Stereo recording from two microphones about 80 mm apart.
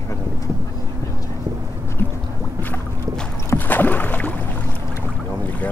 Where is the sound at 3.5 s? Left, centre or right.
Left.